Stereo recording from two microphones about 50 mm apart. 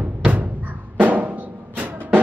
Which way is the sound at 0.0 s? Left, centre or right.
Right.